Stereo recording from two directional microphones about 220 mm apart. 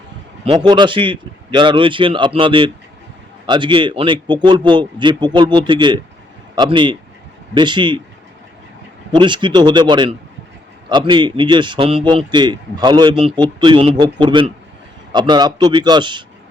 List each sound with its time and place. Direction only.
0.4 s a man's voice: 20° right (ahead or behind)
9.1 s a man's voice: 20° right (ahead or behind)